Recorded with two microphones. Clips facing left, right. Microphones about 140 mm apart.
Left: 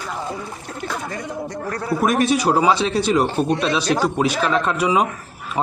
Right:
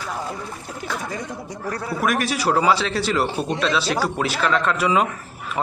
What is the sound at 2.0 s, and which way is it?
A man's voice, 25° left (ahead or behind).